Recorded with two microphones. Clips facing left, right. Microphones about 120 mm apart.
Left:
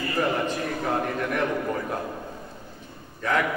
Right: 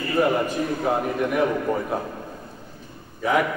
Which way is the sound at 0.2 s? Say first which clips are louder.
Right 4 dB; 10° right (ahead or behind).